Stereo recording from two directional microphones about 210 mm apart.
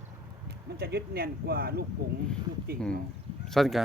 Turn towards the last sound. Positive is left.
turn(degrees=0)  # may be behind; listen again after turning